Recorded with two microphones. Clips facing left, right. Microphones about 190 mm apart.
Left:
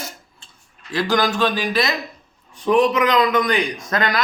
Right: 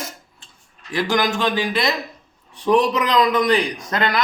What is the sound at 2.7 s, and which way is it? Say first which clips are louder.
A man's voice: left 1 dB; 35° right (ahead or behind).